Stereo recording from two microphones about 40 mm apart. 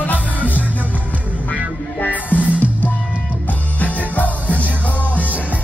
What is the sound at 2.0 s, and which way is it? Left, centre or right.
Music, left.